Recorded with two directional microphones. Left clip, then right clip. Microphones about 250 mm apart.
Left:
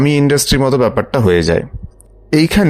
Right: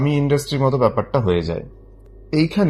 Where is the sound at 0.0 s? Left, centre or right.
Left.